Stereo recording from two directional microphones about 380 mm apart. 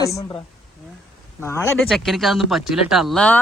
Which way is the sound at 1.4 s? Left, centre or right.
Centre.